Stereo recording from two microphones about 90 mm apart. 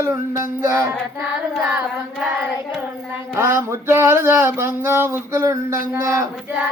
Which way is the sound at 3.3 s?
30° right (ahead or behind).